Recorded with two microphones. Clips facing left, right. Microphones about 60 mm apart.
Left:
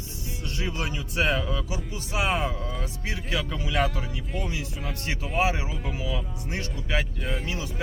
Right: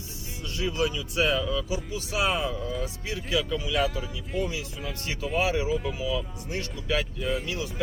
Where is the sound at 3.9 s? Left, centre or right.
Centre.